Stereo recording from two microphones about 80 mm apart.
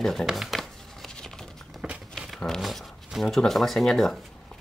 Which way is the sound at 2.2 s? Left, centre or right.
Centre.